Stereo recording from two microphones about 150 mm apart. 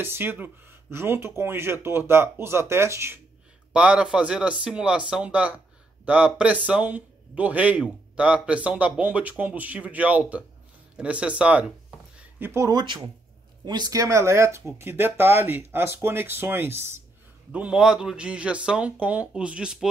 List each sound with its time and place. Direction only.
0.0 s a man's voice: 15° right (ahead or behind)
3.7 s a man's voice: 5° right (ahead or behind)